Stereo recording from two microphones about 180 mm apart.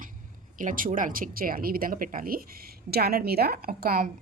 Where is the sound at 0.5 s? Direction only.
45° right (ahead or behind).